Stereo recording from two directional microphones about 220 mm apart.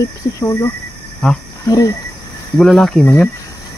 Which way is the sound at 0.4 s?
15° left (ahead or behind).